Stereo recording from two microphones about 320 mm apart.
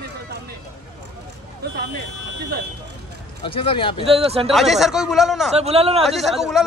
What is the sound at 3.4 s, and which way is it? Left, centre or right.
Speech, centre.